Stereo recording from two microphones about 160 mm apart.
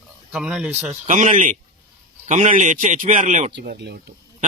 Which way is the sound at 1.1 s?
50° right (ahead or behind).